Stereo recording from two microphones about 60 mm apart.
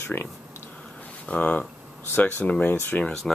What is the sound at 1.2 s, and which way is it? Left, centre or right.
Speech, left.